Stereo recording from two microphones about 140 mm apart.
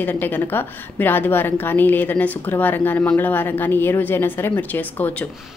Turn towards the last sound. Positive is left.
turn(degrees=10)  # may be behind; listen again after turning